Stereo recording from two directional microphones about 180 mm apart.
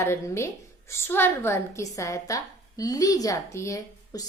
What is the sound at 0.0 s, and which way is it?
A woman's voice, 15° left (ahead or behind).